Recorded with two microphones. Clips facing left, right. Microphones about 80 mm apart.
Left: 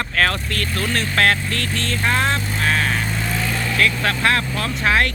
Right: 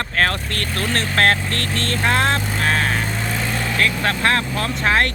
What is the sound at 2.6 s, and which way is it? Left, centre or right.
Vehicle, right.